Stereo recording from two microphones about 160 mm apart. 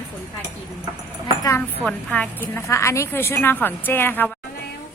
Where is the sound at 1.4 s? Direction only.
20° left (ahead or behind).